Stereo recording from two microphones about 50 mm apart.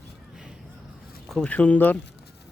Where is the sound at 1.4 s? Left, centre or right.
Left.